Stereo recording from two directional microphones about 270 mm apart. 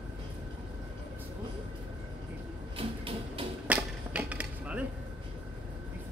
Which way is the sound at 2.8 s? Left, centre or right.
Centre.